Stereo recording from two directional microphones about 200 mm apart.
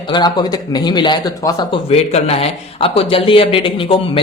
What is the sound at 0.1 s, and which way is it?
A man's voice, 20° left (ahead or behind).